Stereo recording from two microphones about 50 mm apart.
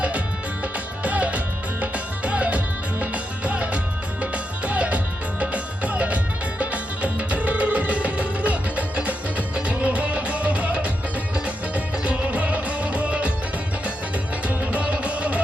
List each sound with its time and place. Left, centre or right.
0.6 s music: right
14.4 s music: right